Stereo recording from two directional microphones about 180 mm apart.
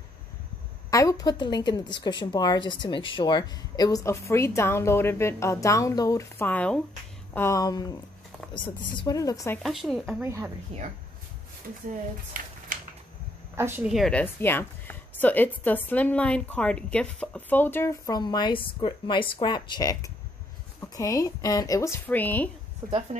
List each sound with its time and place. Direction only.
0.8 s a woman's voice: 20° left (ahead or behind)
8.9 s a woman's voice: 20° left (ahead or behind)
9.6 s speech: centre (ahead or behind)
10.2 s speech: 15° right (ahead or behind)
10.7 s speech: 30° right (ahead or behind)
12.4 s speech: 50° right (ahead or behind)
13.6 s a woman's voice: 10° right (ahead or behind); by 22.5 s 10° left (ahead or behind)
22.8 s speech: 15° right (ahead or behind)